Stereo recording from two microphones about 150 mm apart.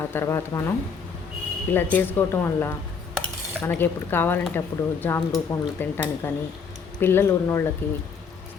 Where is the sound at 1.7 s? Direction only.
15° left (ahead or behind).